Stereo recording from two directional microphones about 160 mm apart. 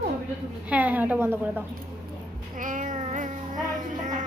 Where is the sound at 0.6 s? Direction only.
10° right (ahead or behind).